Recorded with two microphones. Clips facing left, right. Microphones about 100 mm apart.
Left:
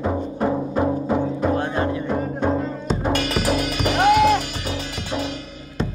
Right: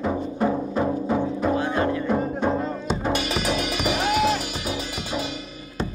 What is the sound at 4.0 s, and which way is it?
Music, 60° left (ahead or behind).